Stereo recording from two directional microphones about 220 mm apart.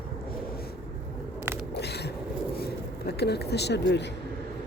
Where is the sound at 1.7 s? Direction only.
50° left (ahead or behind).